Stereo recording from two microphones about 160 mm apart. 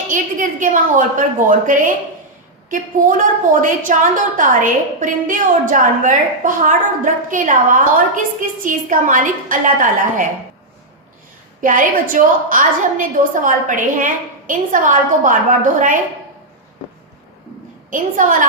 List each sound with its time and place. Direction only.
0.1 s a woman's voice: 55° right (ahead or behind)
11.6 s a woman's voice: 55° right (ahead or behind)
17.9 s a woman's voice: 55° right (ahead or behind)